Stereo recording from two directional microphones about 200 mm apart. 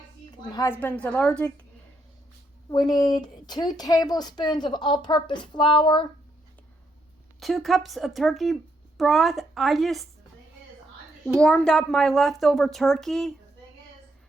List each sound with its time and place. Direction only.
0.5 s a woman's voice: 15° left (ahead or behind)
2.6 s a woman's voice: 20° left (ahead or behind)
7.3 s a child's voice: centre (ahead or behind)
11.3 s a child's voice: 5° left (ahead or behind)